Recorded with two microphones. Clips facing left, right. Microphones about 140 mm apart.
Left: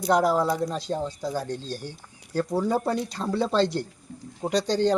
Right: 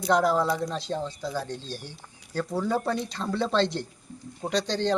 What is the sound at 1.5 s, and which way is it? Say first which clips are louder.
Speech: left 4 dB; 45° left (ahead or behind).